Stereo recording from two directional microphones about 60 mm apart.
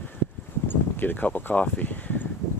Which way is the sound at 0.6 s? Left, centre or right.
Left.